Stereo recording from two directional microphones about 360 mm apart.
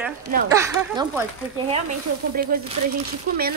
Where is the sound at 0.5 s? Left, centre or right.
Centre.